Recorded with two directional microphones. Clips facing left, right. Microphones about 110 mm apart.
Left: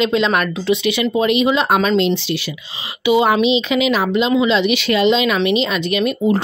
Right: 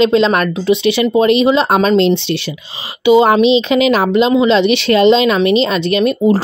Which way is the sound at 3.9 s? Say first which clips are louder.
Right 4 dB; 45° right (ahead or behind).